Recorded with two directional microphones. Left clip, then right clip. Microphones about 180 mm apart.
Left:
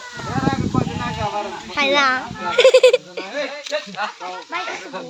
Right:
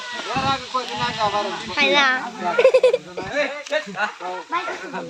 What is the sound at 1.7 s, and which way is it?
A child's voice, 70° left (ahead or behind).